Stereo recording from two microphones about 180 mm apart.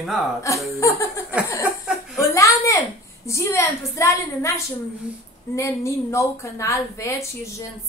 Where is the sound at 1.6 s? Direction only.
5° right (ahead or behind).